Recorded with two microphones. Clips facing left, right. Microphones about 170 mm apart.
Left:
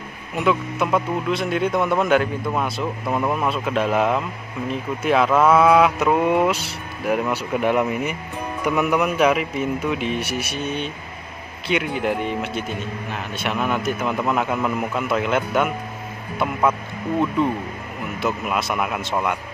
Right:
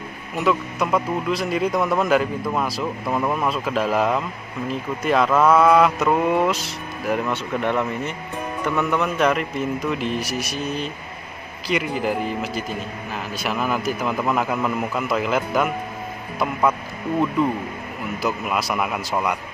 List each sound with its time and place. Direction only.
0.4 s speech: centre (ahead or behind)
17.4 s speech: centre (ahead or behind)